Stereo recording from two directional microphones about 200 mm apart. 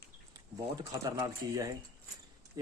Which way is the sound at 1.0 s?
20° right (ahead or behind).